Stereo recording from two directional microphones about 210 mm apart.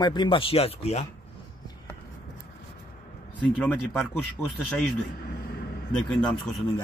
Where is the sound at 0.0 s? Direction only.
20° left (ahead or behind).